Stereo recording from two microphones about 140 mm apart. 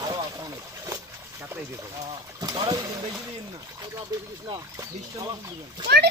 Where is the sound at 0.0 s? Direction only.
25° right (ahead or behind).